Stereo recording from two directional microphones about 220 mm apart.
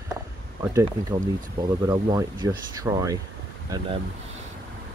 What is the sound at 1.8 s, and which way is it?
Speech, 15° right (ahead or behind).